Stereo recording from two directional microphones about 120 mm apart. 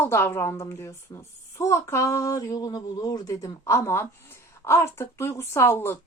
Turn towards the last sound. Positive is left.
turn(degrees=20)  # may be behind; listen again after turning